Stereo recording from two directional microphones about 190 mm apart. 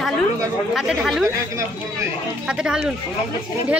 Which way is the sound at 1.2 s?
15° right (ahead or behind).